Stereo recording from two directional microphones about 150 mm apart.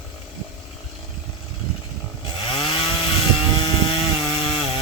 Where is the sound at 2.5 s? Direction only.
35° left (ahead or behind).